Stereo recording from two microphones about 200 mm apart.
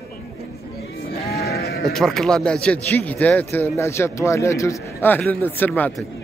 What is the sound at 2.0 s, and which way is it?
Speech, 5° left (ahead or behind).